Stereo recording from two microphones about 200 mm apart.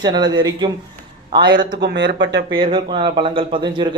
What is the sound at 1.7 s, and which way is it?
Speech, 55° right (ahead or behind).